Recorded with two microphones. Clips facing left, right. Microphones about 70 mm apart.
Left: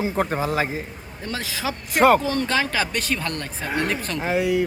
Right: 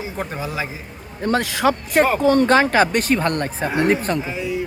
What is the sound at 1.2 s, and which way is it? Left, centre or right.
Speech, right.